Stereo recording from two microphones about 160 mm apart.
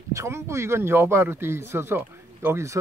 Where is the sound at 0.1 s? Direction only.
20° right (ahead or behind).